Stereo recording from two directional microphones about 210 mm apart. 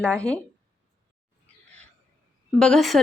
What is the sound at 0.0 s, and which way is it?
Speech, 5° left (ahead or behind).